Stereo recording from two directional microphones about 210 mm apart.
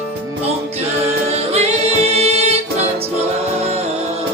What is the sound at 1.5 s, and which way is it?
A capella, 30° right (ahead or behind).